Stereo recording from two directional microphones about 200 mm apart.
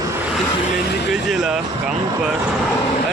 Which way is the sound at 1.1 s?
Centre (ahead or behind).